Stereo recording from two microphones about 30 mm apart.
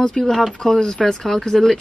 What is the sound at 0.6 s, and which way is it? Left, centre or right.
Speech, left.